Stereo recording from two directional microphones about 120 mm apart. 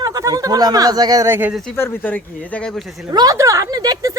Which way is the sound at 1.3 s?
15° right (ahead or behind).